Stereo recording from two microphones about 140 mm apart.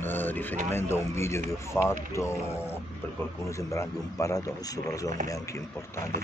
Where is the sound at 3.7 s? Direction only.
20° left (ahead or behind).